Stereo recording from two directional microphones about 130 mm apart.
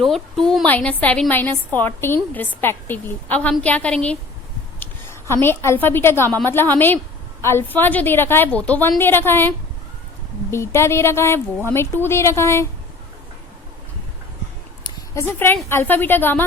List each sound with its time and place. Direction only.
0.0 s a woman's voice: centre (ahead or behind)
5.3 s a woman's voice: 20° left (ahead or behind)
14.8 s a sound: 20° left (ahead or behind)
15.7 s a woman's voice: 15° left (ahead or behind)